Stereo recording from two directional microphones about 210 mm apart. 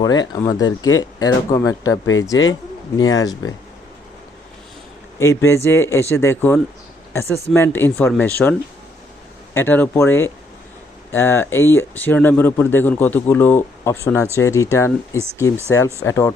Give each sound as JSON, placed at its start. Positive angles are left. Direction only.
{"t": 0.0, "sound": "speech", "side_deg": 20}
{"t": 5.2, "sound": "speech", "side_deg": 15}
{"t": 9.6, "sound": "speech", "side_deg": 10}